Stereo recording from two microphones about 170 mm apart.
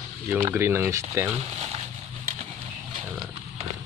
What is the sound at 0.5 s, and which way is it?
Speech, 15° right (ahead or behind).